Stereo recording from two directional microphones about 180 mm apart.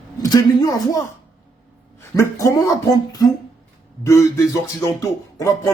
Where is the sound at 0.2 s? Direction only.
20° left (ahead or behind).